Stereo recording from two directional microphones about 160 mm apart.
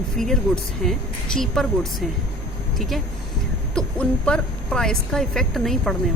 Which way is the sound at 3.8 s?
5° left (ahead or behind).